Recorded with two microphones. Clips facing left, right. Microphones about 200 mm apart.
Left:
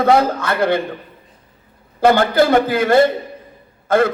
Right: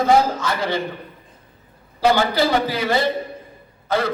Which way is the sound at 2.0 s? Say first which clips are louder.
Left 4 dB; 55° left (ahead or behind).